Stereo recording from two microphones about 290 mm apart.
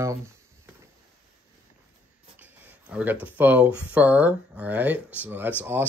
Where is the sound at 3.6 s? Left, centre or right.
Centre.